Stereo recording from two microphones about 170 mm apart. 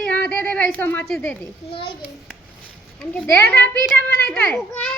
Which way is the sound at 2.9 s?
10° left (ahead or behind).